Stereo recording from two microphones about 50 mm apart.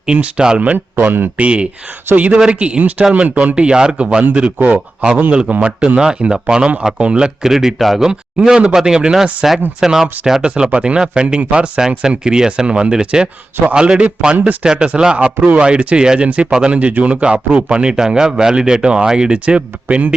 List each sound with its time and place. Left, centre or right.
0.0 s speech: centre
0.6 s speech: right
3.2 s speech: right
4.6 s speech: right
5.3 s speech: right
10.4 s speech: right
11.8 s speech: centre